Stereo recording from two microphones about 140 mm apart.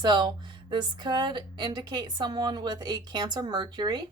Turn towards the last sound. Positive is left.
turn(degrees=-30)  # may be behind; listen again after turning